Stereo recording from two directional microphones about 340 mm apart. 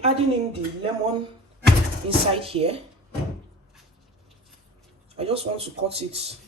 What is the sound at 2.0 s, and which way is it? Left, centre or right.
Speech, centre.